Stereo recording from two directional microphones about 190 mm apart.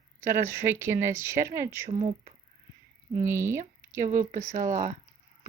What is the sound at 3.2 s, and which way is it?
Speech, 15° right (ahead or behind).